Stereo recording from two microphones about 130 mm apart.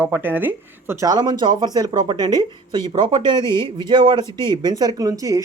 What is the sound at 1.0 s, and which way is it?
Speech, 30° right (ahead or behind).